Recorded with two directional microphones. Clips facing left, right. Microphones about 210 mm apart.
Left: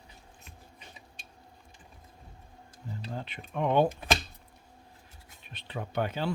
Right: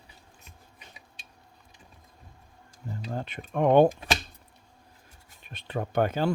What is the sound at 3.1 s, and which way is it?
Speech, 50° right (ahead or behind).